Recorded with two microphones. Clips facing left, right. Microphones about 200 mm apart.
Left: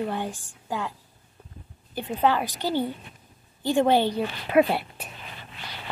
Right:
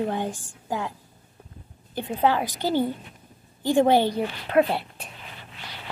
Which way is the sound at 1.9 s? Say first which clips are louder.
Right 1 dB; 15° right (ahead or behind).